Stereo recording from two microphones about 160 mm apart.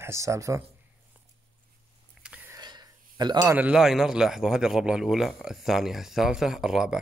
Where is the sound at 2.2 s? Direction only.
10° right (ahead or behind).